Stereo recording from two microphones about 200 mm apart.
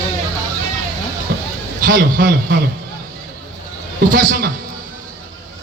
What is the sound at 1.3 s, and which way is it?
Music, 50° right (ahead or behind).